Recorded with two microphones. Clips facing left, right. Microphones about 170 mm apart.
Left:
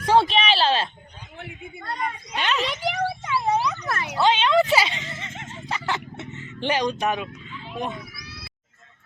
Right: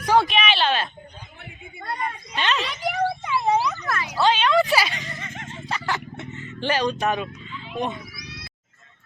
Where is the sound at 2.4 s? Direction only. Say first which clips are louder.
Even; 5° left (ahead or behind).